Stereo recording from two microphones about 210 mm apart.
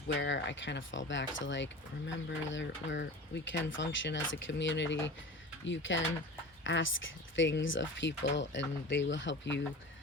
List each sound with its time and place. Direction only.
0.2 s speech: 60° left (ahead or behind)